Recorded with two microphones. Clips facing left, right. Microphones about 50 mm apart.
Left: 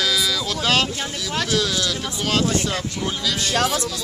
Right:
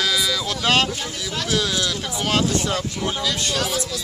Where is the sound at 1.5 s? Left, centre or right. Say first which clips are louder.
Right 1 dB; centre.